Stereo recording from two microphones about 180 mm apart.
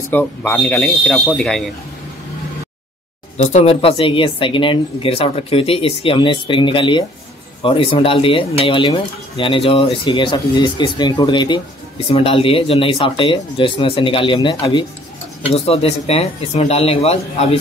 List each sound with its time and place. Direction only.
0.1 s speech: 10° left (ahead or behind)
3.3 s speech: 40° left (ahead or behind)